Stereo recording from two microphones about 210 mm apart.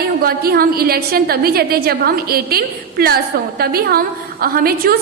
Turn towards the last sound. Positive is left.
turn(degrees=-45)  # may be behind; listen again after turning